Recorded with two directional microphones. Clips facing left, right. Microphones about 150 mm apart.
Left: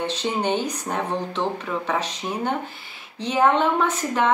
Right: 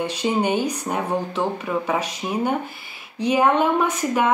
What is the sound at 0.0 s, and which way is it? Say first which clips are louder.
A woman's voice: right 3 dB; 10° right (ahead or behind).